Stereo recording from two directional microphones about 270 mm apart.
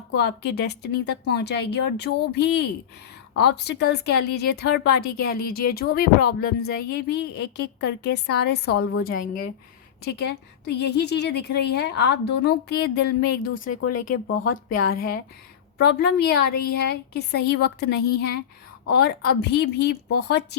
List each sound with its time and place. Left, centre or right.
0.2 s a woman's voice: left
13.7 s speech: left
14.7 s a woman's voice: left